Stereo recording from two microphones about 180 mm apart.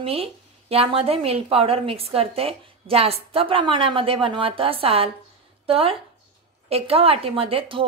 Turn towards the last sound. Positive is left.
turn(degrees=-30)  # may be behind; listen again after turning